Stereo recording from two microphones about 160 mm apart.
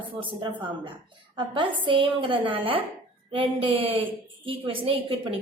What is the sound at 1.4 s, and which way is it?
A woman's voice, 30° right (ahead or behind).